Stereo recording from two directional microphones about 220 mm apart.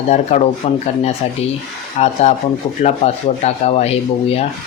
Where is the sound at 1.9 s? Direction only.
30° left (ahead or behind).